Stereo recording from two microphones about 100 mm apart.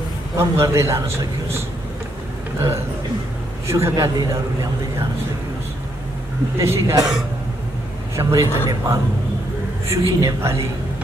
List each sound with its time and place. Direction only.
0.4 s a man's voice: 30° right (ahead or behind)
3.6 s a man's voice: 30° right (ahead or behind)
6.6 s a man's voice: 30° right (ahead or behind)
8.2 s a man's voice: 35° right (ahead or behind)